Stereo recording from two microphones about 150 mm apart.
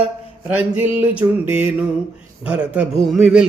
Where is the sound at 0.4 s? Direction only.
10° right (ahead or behind).